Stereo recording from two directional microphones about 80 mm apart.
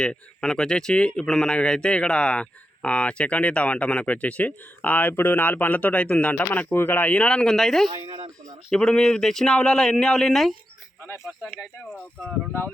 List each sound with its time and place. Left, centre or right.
0.0 s speech: centre
7.9 s speech: right
8.7 s speech: centre